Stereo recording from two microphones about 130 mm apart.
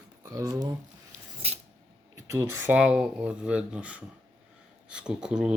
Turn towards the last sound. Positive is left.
turn(degrees=-5)  # may be behind; listen again after turning